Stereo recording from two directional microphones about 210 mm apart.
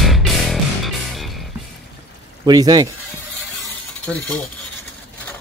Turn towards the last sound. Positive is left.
turn(degrees=5)  # may be behind; listen again after turning